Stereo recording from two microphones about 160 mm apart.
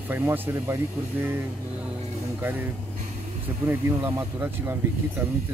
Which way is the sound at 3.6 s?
15° right (ahead or behind).